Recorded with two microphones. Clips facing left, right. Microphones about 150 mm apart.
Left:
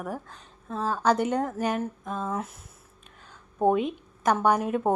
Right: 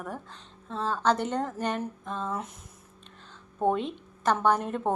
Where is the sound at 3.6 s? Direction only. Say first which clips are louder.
Left 3 dB; 10° left (ahead or behind).